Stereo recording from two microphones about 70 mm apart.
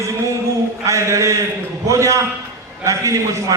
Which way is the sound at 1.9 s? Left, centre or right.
Right.